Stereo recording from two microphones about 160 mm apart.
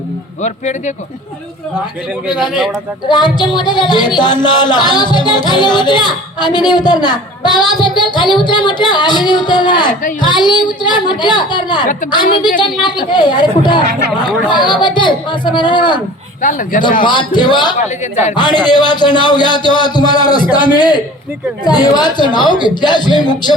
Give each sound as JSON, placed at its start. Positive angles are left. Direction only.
{"t": 0.4, "sound": "speech", "side_deg": 45}
{"t": 3.1, "sound": "speech", "side_deg": 25}
{"t": 7.9, "sound": "music", "side_deg": 30}
{"t": 8.4, "sound": "speech", "side_deg": 30}
{"t": 16.4, "sound": "speech", "side_deg": 55}
{"t": 17.0, "sound": "speech", "side_deg": 30}